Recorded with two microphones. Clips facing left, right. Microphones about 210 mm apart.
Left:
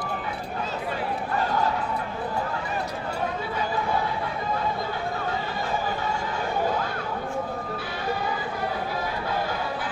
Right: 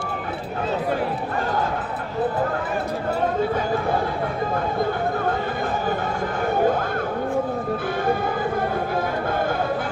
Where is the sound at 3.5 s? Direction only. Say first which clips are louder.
Right 5 dB; 50° right (ahead or behind).